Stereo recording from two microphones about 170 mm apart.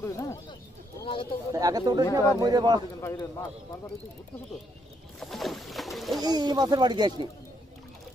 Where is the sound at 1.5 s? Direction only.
20° right (ahead or behind).